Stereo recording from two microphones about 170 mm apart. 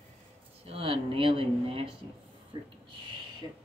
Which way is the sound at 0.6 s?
35° right (ahead or behind).